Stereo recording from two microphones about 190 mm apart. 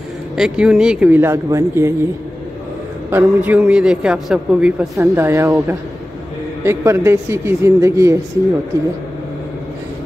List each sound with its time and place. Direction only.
0.4 s speech: 5° right (ahead or behind)
3.1 s a man's voice: 10° right (ahead or behind)